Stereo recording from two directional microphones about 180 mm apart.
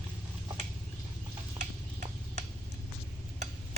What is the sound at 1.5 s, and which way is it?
Tick-tock, 40° right (ahead or behind).